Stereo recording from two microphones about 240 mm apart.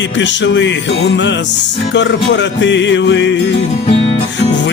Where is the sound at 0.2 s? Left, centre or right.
Left.